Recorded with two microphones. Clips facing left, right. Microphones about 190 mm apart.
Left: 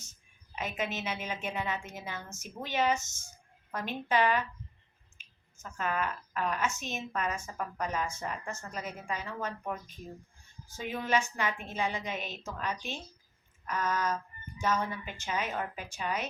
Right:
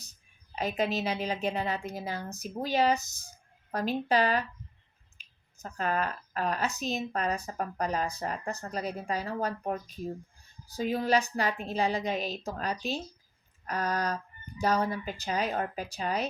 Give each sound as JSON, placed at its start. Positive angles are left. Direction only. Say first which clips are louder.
{"t": 0.5, "sound": "speech", "louder": "right 6 dB", "side_deg": -35}
{"t": 5.2, "sound": "a sound", "louder": "even", "side_deg": -35}
{"t": 5.6, "sound": "speech", "louder": "right 3 dB", "side_deg": -35}